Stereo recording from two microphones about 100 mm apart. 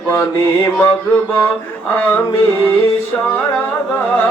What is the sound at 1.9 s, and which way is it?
Music, 20° left (ahead or behind).